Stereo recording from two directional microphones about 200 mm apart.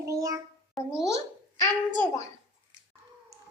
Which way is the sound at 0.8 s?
Centre (ahead or behind).